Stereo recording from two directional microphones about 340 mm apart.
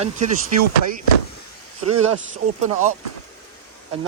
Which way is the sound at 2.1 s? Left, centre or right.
Right.